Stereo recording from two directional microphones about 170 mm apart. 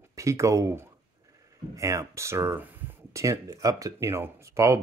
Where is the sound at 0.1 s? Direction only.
20° right (ahead or behind).